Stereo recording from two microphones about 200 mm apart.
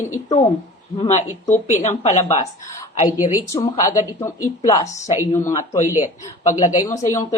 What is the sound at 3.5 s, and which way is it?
A woman's voice, 15° left (ahead or behind).